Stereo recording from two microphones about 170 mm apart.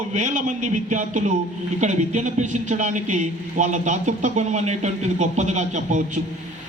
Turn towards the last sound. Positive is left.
turn(degrees=-45)  # may be behind; listen again after turning